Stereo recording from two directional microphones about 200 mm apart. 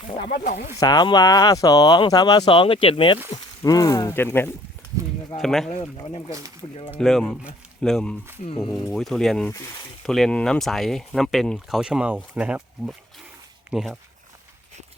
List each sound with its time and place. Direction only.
0.3 s speech: 50° left (ahead or behind)
0.8 s speech: 20° left (ahead or behind); by 5.9 s 5° left (ahead or behind)
6.1 s speech: 30° left (ahead or behind)
7.0 s speech: centre (ahead or behind)
8.4 s speech: 25° left (ahead or behind)
8.9 s speech: centre (ahead or behind)